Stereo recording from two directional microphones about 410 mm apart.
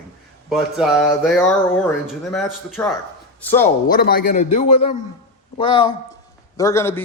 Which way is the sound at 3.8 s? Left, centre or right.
Left.